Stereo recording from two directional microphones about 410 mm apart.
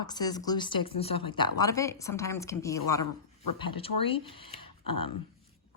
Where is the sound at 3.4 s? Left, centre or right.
Left.